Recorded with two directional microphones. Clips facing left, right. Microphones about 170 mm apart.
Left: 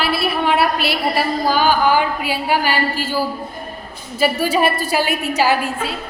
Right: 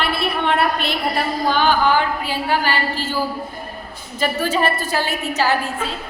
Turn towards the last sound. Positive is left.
turn(degrees=10)  # may be behind; listen again after turning